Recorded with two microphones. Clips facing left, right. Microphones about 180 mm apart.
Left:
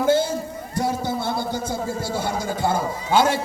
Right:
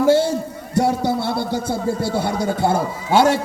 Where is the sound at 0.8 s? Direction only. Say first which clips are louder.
Right 6 dB; 70° right (ahead or behind).